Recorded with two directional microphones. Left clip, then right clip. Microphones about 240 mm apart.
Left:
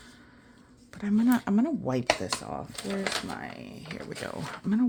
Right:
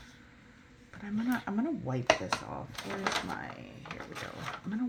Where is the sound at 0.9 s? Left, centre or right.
Left.